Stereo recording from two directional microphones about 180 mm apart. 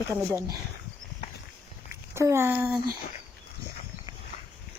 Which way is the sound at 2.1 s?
15° right (ahead or behind).